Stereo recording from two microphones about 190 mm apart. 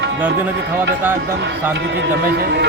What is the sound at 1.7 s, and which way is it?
Speech, 65° right (ahead or behind).